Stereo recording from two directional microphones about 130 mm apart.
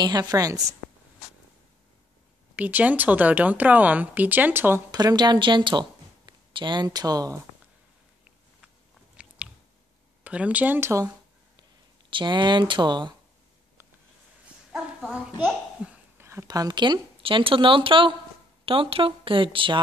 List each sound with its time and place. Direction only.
0.0 s a woman's voice: 30° right (ahead or behind)
2.5 s speech: 10° right (ahead or behind)
4.9 s a woman's voice: 30° right (ahead or behind)
9.1 s biting: 10° right (ahead or behind)
10.2 s speech: 10° right (ahead or behind)
12.1 s speech: 35° right (ahead or behind)
14.7 s speech: centre (ahead or behind)
15.4 s babbling: 10° right (ahead or behind)
16.3 s speech: 25° right (ahead or behind); by 19.8 s 40° right (ahead or behind)